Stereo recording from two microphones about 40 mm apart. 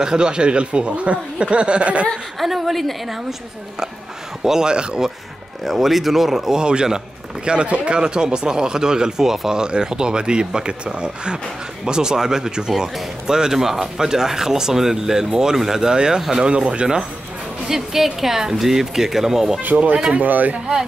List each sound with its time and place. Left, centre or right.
0.0 s speech: right
2.4 s a woman's voice: centre
4.4 s speech: centre
5.7 s a woman's voice: centre
6.5 s speech: right
9.6 s speech: right
16.4 s speech: right
17.6 s speech: centre
20.2 s speech: right
20.5 s speech: centre